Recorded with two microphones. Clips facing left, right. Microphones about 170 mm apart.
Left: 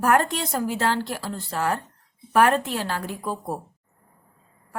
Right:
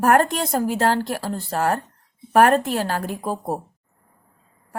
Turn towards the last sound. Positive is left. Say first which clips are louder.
# right 4 dB
turn(degrees=-40)  # may be behind; listen again after turning